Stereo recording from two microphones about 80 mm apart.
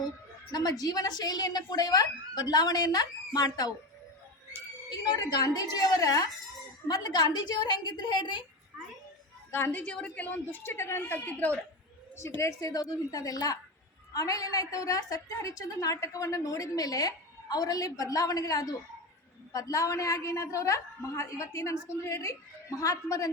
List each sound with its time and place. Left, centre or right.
0.5 s speech: left
5.0 s speech: left
6.8 s a woman's voice: left
9.5 s a woman's voice: left
9.8 s a woman's voice: centre
12.4 s a woman's voice: left